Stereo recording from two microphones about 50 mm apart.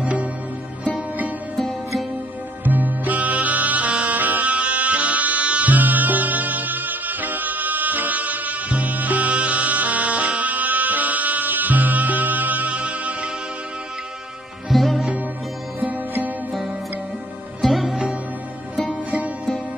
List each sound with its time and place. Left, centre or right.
0.0 s music: right
1.6 s music: centre
2.6 s music: right
14.7 s music: centre
15.8 s music: right
17.6 s music: centre
19.0 s music: right